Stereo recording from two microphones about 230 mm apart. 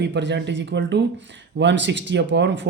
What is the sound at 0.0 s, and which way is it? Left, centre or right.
Speech, right.